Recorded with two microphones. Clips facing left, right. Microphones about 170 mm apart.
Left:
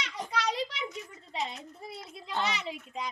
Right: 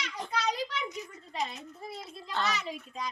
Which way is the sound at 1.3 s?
20° left (ahead or behind).